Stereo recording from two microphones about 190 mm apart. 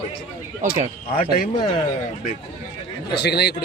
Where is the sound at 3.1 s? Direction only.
60° left (ahead or behind).